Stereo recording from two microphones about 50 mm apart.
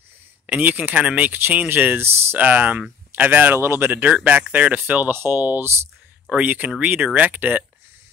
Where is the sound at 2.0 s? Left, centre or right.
Right.